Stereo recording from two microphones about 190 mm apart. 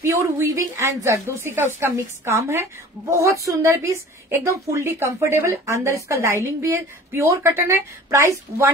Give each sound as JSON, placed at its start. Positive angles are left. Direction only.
{"t": 0.0, "sound": "a woman's voice", "side_deg": -15}